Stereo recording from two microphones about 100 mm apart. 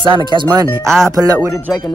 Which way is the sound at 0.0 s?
50° right (ahead or behind).